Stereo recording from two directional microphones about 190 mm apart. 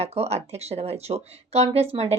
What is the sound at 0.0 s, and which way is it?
Speech, 35° right (ahead or behind).